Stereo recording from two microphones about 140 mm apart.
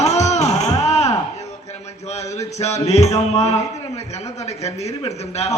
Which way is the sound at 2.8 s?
50° left (ahead or behind).